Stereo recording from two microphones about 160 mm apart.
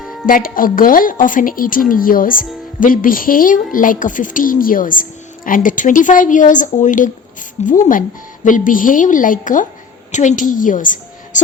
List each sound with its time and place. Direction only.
0.3 s a woman's voice: 60° left (ahead or behind)